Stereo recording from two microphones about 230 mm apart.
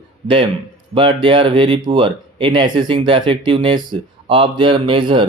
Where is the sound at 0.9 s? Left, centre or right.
Right.